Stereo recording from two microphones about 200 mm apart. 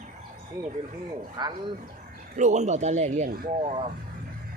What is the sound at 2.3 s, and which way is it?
Speech, 35° right (ahead or behind).